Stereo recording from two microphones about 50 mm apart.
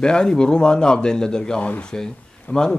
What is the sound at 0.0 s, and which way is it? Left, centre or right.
Speech, centre.